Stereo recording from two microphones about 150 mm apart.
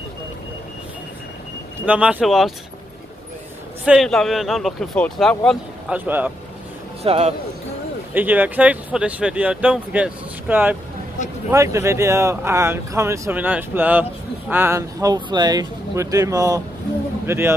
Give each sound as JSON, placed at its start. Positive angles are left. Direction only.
{"t": 1.9, "sound": "speech", "side_deg": -10}
{"t": 3.8, "sound": "speech", "side_deg": -5}
{"t": 5.9, "sound": "speech", "side_deg": -10}
{"t": 7.0, "sound": "a man's voice", "side_deg": -45}
{"t": 8.1, "sound": "speech", "side_deg": -10}